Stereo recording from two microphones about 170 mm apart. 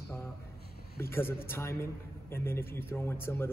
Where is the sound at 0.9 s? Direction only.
15° left (ahead or behind).